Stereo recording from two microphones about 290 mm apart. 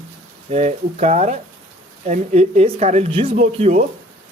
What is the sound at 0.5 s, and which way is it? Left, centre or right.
Speech, right.